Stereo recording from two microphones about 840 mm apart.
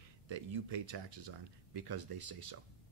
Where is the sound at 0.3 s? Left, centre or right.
Right.